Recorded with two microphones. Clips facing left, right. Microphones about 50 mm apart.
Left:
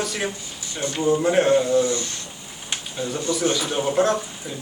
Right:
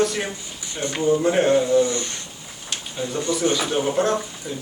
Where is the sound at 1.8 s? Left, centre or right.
Right.